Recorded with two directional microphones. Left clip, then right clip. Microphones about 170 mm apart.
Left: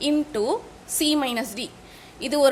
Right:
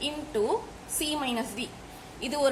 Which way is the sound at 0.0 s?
60° left (ahead or behind).